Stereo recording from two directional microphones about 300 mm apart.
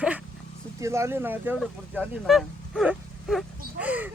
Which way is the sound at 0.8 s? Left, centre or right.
Centre.